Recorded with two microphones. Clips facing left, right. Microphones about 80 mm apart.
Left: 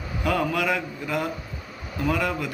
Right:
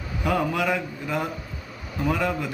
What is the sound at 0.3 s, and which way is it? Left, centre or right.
A man's voice, right.